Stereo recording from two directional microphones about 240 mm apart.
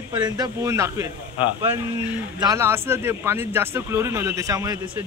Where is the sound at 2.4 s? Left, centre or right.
Centre.